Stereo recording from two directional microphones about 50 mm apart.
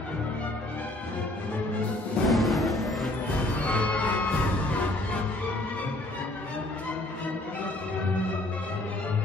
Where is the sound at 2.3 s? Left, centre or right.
Centre.